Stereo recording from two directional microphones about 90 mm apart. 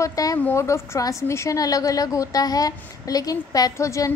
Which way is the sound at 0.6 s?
35° left (ahead or behind).